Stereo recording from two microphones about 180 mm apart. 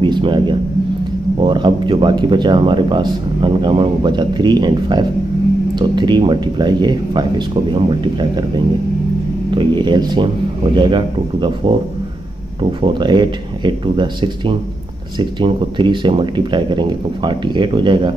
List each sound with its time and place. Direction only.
0.0 s speech: 25° right (ahead or behind)
9.5 s speech: 25° right (ahead or behind)
12.8 s speech: 25° right (ahead or behind)